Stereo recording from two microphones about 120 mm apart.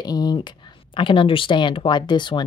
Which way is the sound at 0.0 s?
35° left (ahead or behind).